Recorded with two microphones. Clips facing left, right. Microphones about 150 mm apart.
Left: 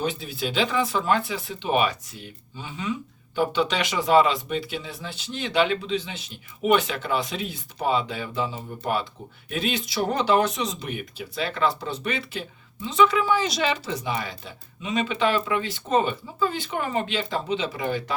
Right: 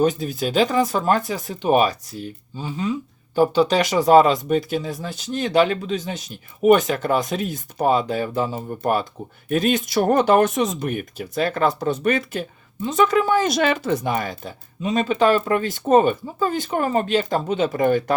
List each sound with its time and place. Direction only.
0.0 s speech: 45° right (ahead or behind)